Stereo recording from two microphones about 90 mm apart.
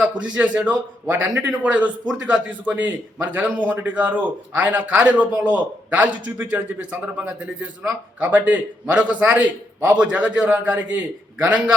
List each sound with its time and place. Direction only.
0.2 s a man's voice: 15° right (ahead or behind)